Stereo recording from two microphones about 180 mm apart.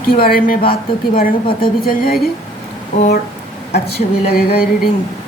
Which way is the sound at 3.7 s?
60° left (ahead or behind).